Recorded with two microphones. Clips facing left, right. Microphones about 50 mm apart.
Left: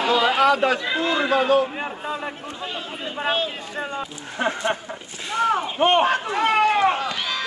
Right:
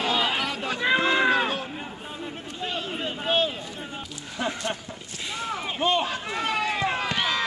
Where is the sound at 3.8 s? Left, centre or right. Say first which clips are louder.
Left 8 dB; left.